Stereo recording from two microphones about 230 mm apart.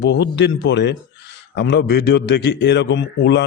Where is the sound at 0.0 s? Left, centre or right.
Left.